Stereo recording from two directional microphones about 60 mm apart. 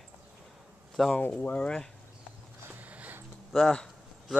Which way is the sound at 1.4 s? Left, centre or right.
Left.